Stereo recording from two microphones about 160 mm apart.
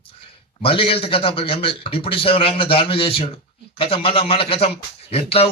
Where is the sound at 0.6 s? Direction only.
35° left (ahead or behind).